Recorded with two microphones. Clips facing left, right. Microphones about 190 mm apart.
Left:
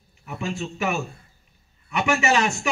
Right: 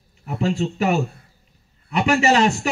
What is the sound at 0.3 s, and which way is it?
Speech, 35° right (ahead or behind).